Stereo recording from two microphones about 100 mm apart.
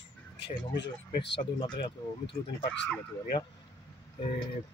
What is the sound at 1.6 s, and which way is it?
Speech, 45° left (ahead or behind).